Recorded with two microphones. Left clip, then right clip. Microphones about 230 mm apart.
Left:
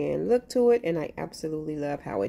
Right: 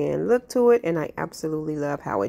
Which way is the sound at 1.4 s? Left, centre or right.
Centre.